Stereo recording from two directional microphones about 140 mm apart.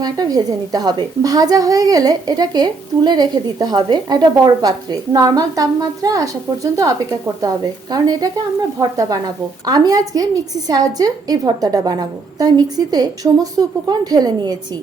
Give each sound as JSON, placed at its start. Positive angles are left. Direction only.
{"t": 0.0, "sound": "a woman's voice", "side_deg": -30}